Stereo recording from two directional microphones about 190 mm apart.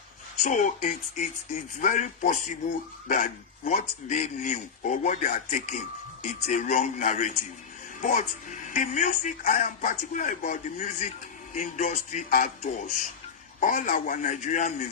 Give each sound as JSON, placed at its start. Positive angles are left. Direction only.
{"t": 0.4, "sound": "a man's voice", "side_deg": 40}